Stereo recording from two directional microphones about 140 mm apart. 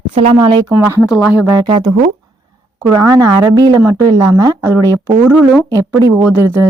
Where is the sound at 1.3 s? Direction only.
10° right (ahead or behind).